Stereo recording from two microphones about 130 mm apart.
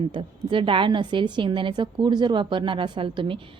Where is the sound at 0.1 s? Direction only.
40° right (ahead or behind).